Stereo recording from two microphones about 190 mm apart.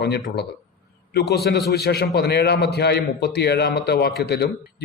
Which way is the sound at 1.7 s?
60° left (ahead or behind).